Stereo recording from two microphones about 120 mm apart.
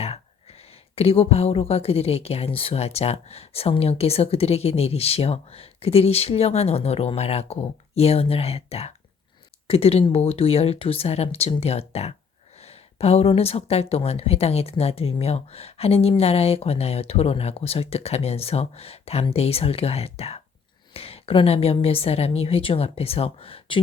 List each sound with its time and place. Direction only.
0.0 s a woman's voice: 55° left (ahead or behind)